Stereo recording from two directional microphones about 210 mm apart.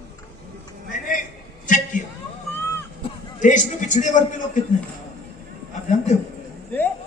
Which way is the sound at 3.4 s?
40° left (ahead or behind).